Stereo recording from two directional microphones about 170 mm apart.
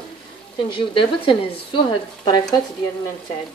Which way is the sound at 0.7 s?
30° left (ahead or behind).